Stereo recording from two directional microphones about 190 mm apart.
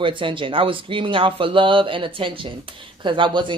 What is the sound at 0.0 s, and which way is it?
Speech, 25° right (ahead or behind).